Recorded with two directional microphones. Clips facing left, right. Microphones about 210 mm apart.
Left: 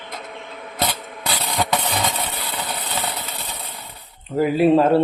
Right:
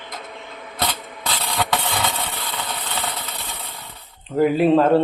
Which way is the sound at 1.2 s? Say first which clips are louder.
Left 1 dB; 15° left (ahead or behind).